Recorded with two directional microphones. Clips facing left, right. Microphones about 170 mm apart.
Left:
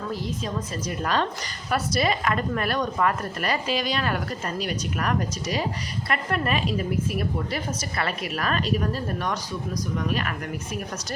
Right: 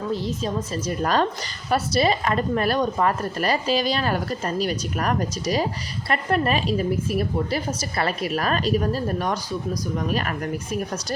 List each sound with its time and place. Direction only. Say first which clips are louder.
0.1 s speech: right 5 dB; 30° right (ahead or behind)